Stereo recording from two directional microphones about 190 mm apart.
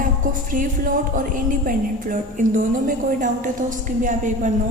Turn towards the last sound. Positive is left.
turn(degrees=-40)  # may be behind; listen again after turning